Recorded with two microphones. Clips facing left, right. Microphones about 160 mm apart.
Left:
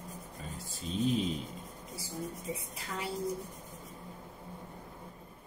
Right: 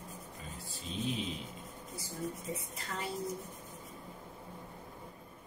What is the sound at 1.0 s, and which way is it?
Speech, 40° left (ahead or behind).